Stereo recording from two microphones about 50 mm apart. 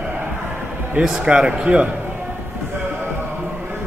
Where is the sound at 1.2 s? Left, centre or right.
Right.